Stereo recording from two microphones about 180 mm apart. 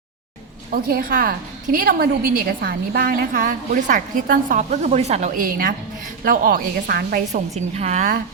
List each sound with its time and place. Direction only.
0.7 s a woman's voice: 55° right (ahead or behind)
7.8 s a woman's voice: 40° right (ahead or behind)